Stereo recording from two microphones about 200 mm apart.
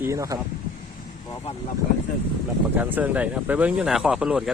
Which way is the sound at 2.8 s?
10° right (ahead or behind).